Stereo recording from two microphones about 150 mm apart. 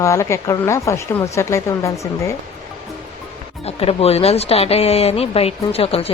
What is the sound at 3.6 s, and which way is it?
Speech, 40° left (ahead or behind).